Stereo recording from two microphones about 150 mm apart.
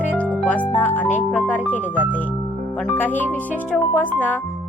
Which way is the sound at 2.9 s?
10° left (ahead or behind).